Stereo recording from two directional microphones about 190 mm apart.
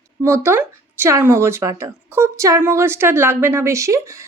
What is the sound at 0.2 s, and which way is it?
A woman's voice, 15° right (ahead or behind).